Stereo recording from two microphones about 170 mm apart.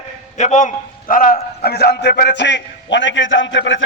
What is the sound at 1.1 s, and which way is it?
A man's voice, 55° left (ahead or behind).